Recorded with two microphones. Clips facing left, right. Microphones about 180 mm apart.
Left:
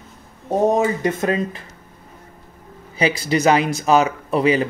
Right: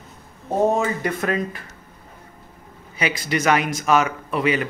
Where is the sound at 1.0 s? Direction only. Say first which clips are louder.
Left 3 dB; 25° left (ahead or behind).